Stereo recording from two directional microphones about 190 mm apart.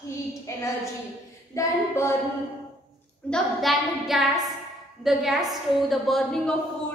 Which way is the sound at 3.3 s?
Centre (ahead or behind).